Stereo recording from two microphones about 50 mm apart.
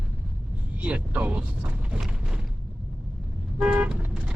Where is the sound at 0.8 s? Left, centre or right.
Right.